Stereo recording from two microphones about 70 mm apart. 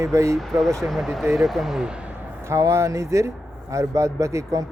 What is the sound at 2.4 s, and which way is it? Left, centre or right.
Speech, right.